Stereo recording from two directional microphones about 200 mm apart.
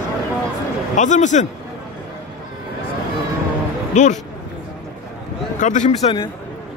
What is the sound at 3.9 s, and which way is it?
Speech, 35° left (ahead or behind).